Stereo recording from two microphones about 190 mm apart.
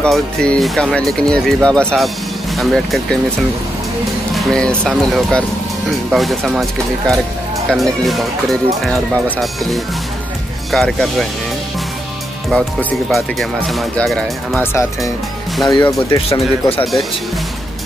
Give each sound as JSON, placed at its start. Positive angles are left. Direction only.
{"t": 0.0, "sound": "speech", "side_deg": 5}
{"t": 4.4, "sound": "speech", "side_deg": 5}
{"t": 12.5, "sound": "speech", "side_deg": 5}
{"t": 14.6, "sound": "speech", "side_deg": 15}